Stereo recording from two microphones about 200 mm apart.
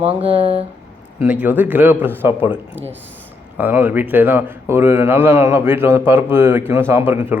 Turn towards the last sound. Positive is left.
turn(degrees=-10)  # may be behind; listen again after turning